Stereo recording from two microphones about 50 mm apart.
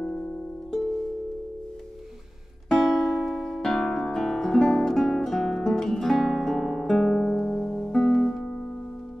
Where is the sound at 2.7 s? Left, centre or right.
Centre.